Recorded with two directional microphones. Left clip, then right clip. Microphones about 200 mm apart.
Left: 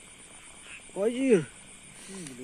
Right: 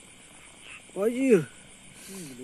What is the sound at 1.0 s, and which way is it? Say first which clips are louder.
Speech: right 2 dB; 20° right (ahead or behind).